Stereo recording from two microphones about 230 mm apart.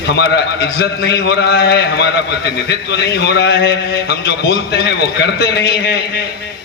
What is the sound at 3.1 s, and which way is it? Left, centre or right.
A man's voice, left.